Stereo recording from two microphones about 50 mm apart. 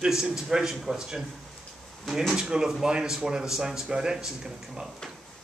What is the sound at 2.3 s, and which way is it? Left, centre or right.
Speech, centre.